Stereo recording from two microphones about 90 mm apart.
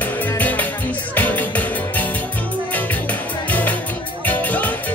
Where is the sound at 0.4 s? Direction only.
20° left (ahead or behind).